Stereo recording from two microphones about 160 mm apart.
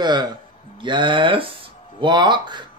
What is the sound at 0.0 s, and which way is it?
Speech, 25° right (ahead or behind).